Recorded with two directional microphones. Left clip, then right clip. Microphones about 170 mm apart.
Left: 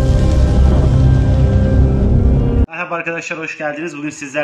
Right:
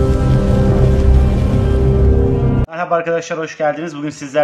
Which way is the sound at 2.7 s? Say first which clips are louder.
Right 8 dB; 45° right (ahead or behind).